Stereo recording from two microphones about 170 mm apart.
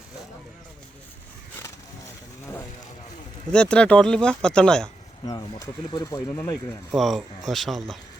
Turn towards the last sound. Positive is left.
turn(degrees=0)  # may be behind; listen again after turning